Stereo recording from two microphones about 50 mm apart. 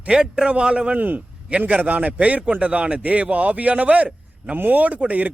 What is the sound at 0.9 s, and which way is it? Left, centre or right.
Speech, right.